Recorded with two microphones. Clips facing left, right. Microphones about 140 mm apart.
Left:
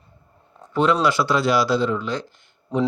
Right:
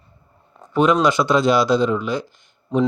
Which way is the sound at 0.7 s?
15° right (ahead or behind).